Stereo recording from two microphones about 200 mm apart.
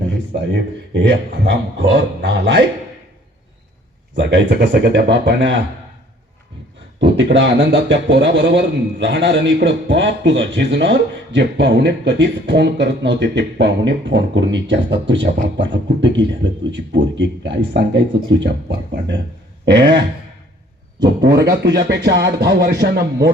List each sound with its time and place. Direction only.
0.9 s a man's voice: 60° right (ahead or behind)
4.1 s a man's voice: 60° right (ahead or behind)
7.0 s a man's voice: 60° right (ahead or behind)
21.2 s a man's voice: 55° right (ahead or behind)